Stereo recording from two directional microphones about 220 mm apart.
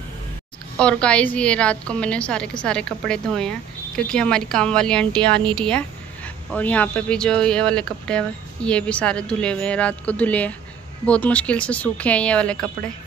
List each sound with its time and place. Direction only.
0.7 s speech: 5° left (ahead or behind)
5.4 s a woman's voice: 20° right (ahead or behind)
5.7 s speech: 5° left (ahead or behind)